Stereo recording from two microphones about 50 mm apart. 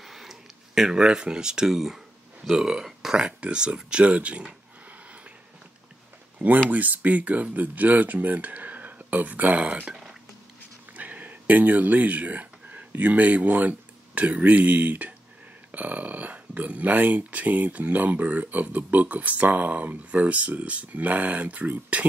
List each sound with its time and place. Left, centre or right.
0.0 s speech: centre
3.3 s speech: right
6.7 s speech: right